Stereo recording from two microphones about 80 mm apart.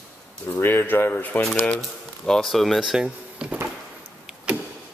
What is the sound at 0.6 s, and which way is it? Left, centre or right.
Speech, left.